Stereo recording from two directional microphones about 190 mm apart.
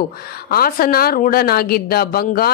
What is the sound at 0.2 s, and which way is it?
A woman's voice, 55° left (ahead or behind).